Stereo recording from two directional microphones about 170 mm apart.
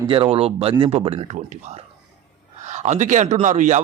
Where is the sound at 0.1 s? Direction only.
35° right (ahead or behind).